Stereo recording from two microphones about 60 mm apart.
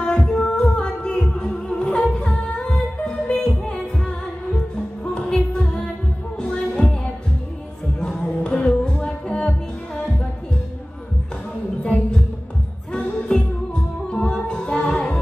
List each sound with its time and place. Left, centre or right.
0.2 s music: centre
8.0 s music: centre
11.8 s music: centre
14.0 s music: centre